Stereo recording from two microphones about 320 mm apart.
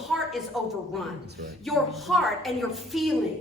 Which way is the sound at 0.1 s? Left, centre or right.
Centre.